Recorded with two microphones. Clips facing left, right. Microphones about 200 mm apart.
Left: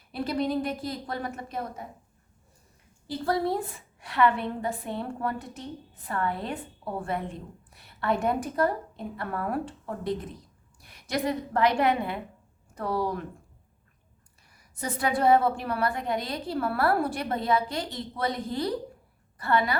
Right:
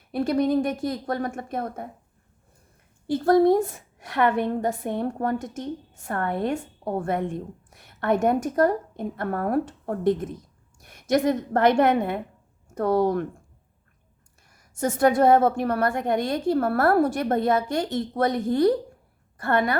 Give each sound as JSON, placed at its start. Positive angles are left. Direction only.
{"t": 0.1, "sound": "a woman's voice", "side_deg": -50}
{"t": 3.1, "sound": "a woman's voice", "side_deg": -50}
{"t": 7.8, "sound": "a sound", "side_deg": -50}
{"t": 8.2, "sound": "a woman's voice", "side_deg": -45}
{"t": 14.5, "sound": "a woman's voice", "side_deg": -45}